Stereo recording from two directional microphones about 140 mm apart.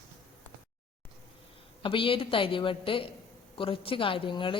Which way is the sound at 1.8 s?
40° left (ahead or behind).